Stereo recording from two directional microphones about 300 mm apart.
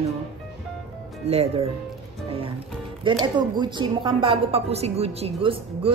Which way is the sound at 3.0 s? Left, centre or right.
Centre.